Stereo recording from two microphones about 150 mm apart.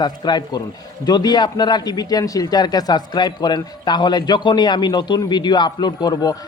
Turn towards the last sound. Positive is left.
turn(degrees=25)  # may be behind; listen again after turning